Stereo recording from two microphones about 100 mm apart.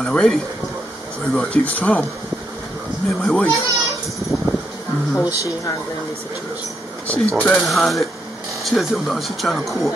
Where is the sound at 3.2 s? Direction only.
5° left (ahead or behind).